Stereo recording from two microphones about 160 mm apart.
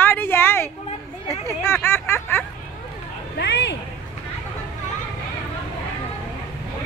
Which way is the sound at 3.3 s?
90° left.